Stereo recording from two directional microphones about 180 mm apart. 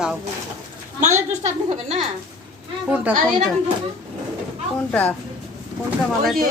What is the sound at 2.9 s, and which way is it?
Speech, 10° right (ahead or behind).